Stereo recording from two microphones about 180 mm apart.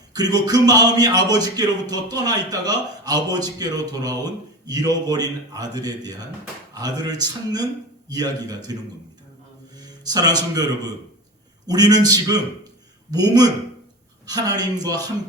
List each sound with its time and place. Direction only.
0.1 s a man's voice: 20° right (ahead or behind)
9.7 s a man's voice: 20° right (ahead or behind)